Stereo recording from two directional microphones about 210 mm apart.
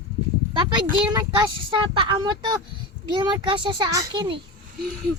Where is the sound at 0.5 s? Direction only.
20° right (ahead or behind).